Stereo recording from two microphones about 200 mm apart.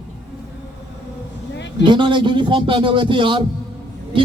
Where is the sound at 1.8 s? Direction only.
25° right (ahead or behind).